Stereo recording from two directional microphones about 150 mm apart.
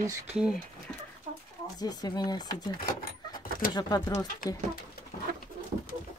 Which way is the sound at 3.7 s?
25° left (ahead or behind).